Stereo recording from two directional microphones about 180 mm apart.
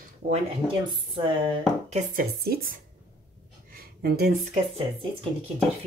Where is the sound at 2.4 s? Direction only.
55° right (ahead or behind).